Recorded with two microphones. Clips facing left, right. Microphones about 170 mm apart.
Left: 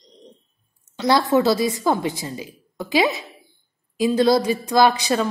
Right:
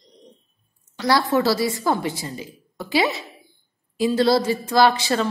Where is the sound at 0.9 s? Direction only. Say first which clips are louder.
Left 2 dB; 20° left (ahead or behind).